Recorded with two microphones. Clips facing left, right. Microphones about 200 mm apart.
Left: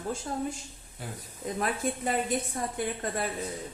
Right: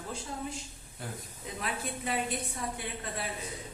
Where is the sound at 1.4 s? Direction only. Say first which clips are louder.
Left 7 dB; 45° left (ahead or behind).